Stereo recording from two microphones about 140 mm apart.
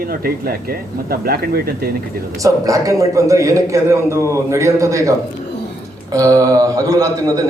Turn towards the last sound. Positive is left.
turn(degrees=-25)  # may be behind; listen again after turning